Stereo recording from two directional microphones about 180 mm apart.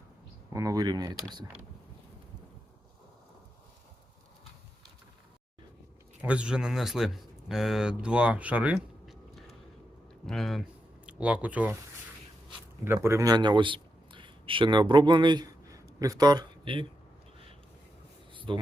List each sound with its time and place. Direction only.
0.5 s speech: 20° right (ahead or behind)
6.2 s speech: 5° right (ahead or behind)
12.8 s a man's voice: 15° right (ahead or behind)
18.3 s a sound: 25° right (ahead or behind)